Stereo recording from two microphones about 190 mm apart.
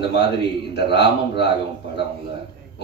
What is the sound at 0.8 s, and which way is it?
Speech, 60° left (ahead or behind).